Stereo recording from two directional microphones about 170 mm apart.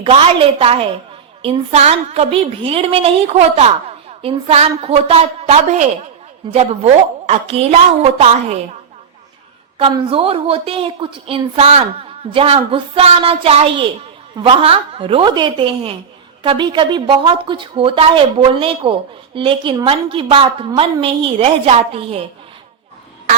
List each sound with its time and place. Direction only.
0.0 s a woman's voice: 35° right (ahead or behind)
9.9 s a woman's voice: 30° right (ahead or behind)